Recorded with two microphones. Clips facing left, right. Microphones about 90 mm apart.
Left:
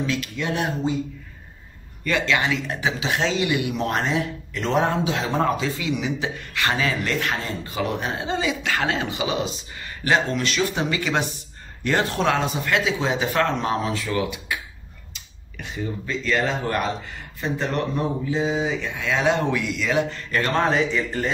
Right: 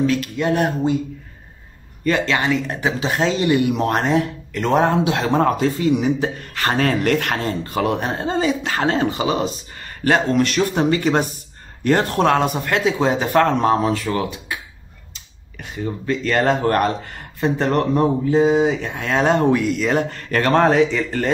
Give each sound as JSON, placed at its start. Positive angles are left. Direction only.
{"t": 0.0, "sound": "a man's voice", "side_deg": -45}
{"t": 2.0, "sound": "speech", "side_deg": -30}
{"t": 3.7, "sound": "a man's voice", "side_deg": -55}